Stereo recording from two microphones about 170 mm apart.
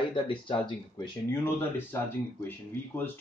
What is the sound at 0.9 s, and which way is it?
Speech, 15° left (ahead or behind).